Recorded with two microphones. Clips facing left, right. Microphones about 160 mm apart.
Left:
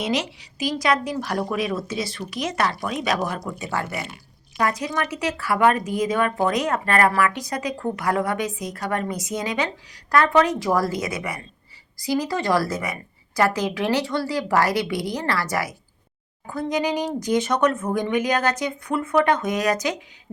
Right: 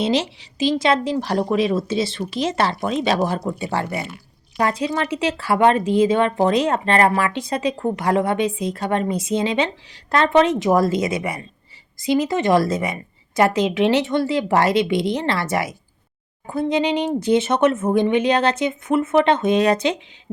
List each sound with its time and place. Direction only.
0.0 s speech: 30° right (ahead or behind)